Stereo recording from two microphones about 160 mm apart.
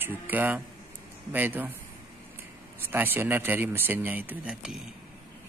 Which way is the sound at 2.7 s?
15° right (ahead or behind).